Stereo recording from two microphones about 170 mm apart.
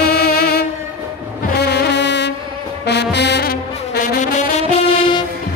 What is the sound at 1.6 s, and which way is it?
Brass instrument, 80° left.